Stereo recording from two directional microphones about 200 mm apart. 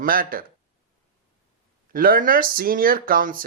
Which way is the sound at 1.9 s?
45° right (ahead or behind).